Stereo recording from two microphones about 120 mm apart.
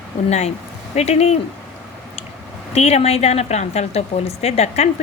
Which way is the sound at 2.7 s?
60° left (ahead or behind).